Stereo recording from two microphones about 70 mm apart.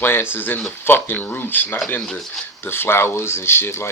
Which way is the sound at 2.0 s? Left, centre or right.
Centre.